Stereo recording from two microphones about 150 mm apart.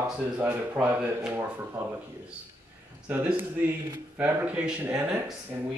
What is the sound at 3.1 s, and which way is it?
Speech, 10° right (ahead or behind).